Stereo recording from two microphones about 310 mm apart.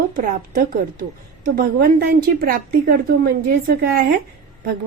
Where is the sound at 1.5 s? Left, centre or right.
Right.